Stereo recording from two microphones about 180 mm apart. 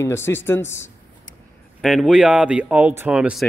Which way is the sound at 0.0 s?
15° left (ahead or behind).